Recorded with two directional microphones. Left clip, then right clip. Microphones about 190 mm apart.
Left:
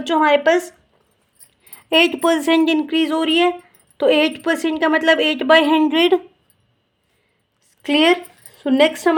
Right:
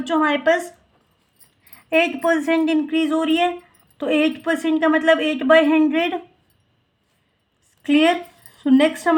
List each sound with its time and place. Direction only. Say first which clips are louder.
0.0 s a woman's voice: left 4 dB; 35° left (ahead or behind)
1.7 s a woman's voice: left 3 dB; 45° left (ahead or behind)
7.8 s a woman's voice: left 2 dB; 40° left (ahead or behind)